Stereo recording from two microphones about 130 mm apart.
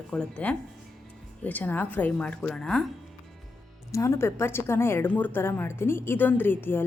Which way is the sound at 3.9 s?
20° left (ahead or behind).